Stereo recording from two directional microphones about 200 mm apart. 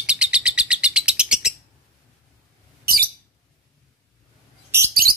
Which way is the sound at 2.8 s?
50° right (ahead or behind).